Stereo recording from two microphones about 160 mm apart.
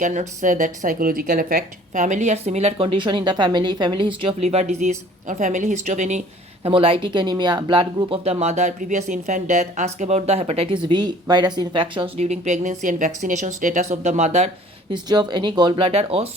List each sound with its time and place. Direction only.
0.0 s speech: 50° right (ahead or behind)
6.7 s speech: 35° right (ahead or behind)
14.9 s speech: 25° right (ahead or behind)